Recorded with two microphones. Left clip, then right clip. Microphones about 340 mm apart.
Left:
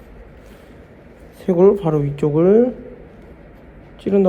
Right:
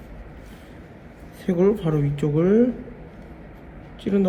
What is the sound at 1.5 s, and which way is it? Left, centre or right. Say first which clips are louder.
Speech: left 7 dB; centre.